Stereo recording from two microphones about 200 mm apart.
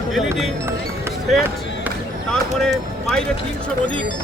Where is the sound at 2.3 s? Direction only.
Centre (ahead or behind).